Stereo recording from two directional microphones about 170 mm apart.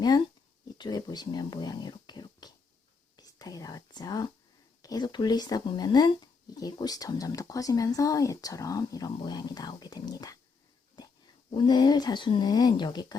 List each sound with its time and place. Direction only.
0.8 s speech: 25° left (ahead or behind)
11.5 s speech: 25° left (ahead or behind)